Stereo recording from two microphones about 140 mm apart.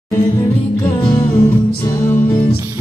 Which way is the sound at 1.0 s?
35° left (ahead or behind).